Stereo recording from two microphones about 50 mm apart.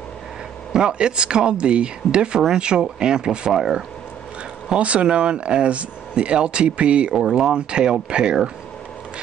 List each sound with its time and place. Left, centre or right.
0.7 s speech: centre
4.6 s speech: right
7.2 s speech: centre